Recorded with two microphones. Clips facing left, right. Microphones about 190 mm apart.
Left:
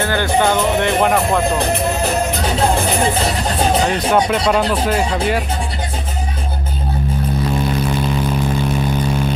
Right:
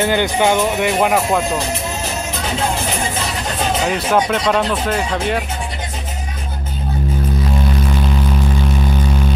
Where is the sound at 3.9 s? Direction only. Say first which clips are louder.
Left 1 dB; 5° right (ahead or behind).